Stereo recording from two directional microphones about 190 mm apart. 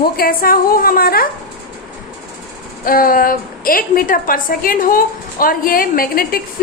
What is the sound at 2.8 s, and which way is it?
A woman's voice, 50° left (ahead or behind).